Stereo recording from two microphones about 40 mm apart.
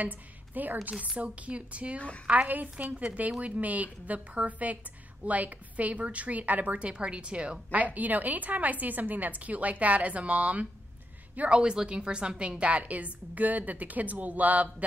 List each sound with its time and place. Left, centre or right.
0.0 s speech: right
0.8 s a woman's voice: right
2.0 s a woman's voice: left
2.2 s a woman's voice: right
7.7 s a woman's voice: right